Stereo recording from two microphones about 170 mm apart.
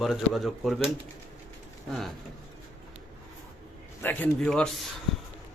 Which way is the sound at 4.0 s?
10° left (ahead or behind).